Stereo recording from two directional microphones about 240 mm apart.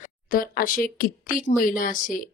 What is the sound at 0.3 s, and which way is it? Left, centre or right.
A woman's voice, left.